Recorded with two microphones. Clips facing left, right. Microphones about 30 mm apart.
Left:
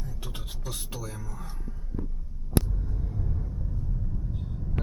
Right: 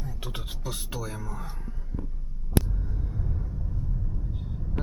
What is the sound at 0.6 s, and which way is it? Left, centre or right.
Speech, centre.